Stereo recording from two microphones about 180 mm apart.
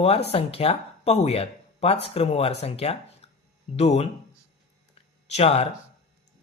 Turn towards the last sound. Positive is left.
turn(degrees=35)  # may be behind; listen again after turning